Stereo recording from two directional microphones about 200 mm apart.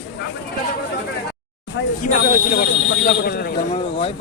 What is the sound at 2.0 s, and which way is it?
Speech, 40° left (ahead or behind).